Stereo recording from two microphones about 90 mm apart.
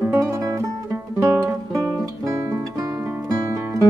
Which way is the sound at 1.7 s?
35° right (ahead or behind).